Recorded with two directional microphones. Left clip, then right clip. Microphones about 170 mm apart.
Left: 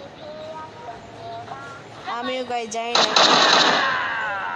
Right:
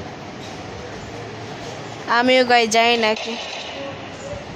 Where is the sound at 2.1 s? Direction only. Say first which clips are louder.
Right 12 dB; 5° right (ahead or behind).